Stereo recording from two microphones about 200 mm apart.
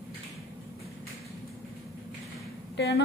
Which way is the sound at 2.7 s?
60° left (ahead or behind).